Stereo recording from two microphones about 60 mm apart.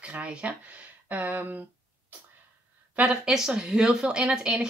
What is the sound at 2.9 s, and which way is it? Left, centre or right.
Speech, centre.